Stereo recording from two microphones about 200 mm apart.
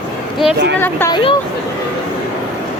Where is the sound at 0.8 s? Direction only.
10° left (ahead or behind).